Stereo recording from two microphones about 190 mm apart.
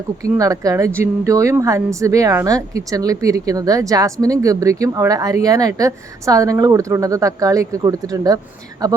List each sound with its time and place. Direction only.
0.2 s a woman's voice: 15° right (ahead or behind)